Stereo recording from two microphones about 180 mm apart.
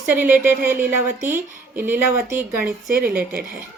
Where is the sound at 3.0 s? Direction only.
55° right (ahead or behind).